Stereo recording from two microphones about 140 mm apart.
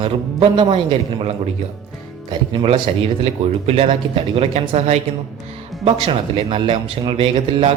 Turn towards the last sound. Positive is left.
turn(degrees=-40)  # may be behind; listen again after turning